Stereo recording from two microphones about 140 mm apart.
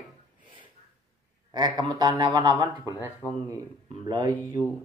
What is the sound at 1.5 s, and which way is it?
Speech, 30° right (ahead or behind).